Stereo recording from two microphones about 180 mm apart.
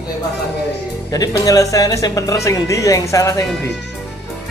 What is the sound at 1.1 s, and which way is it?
Speech, 20° left (ahead or behind).